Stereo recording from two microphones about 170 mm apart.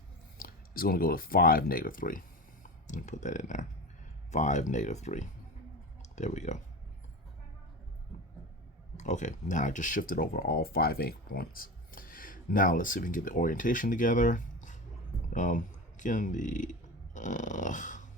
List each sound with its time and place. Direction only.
0.3 s speech: 60° left (ahead or behind)
9.0 s speech: 45° left (ahead or behind)
17.2 s dog: 45° left (ahead or behind)